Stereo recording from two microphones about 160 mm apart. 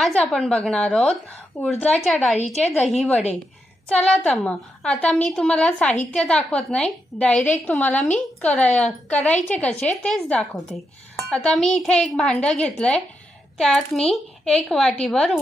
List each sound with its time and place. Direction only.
0.0 s a child's voice: 5° left (ahead or behind)
2.3 s a woman's voice: 45° left (ahead or behind)
2.6 s a woman's voice: 10° left (ahead or behind)